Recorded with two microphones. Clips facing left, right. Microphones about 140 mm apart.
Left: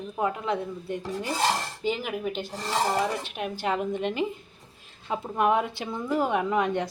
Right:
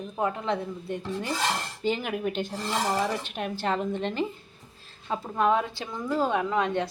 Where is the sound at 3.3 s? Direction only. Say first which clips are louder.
Even; 10° left (ahead or behind).